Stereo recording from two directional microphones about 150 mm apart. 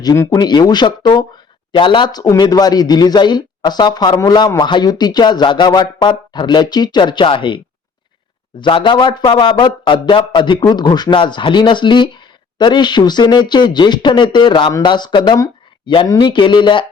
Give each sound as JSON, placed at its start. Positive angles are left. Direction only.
{"t": 0.0, "sound": "speech", "side_deg": 25}